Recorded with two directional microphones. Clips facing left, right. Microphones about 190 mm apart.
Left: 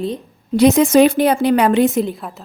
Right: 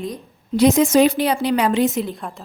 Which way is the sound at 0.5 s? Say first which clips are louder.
Left 3 dB; 60° left (ahead or behind).